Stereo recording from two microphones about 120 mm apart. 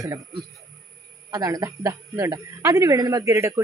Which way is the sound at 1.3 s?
30° right (ahead or behind).